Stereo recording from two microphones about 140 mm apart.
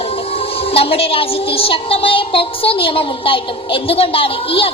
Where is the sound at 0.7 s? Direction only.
45° left (ahead or behind).